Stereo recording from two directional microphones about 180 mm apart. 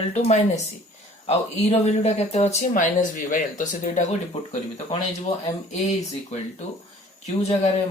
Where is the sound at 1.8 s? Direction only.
40° left (ahead or behind).